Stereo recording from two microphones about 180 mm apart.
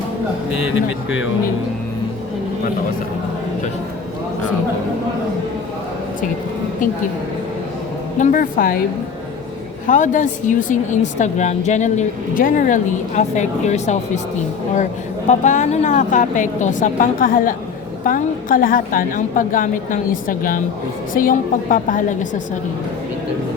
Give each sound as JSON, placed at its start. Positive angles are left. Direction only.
{"t": 8.2, "sound": "speech", "side_deg": 50}
{"t": 9.8, "sound": "speech", "side_deg": 45}
{"t": 15.3, "sound": "speech", "side_deg": 40}